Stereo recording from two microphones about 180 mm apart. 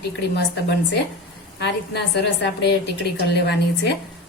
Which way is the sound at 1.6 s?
70° left (ahead or behind).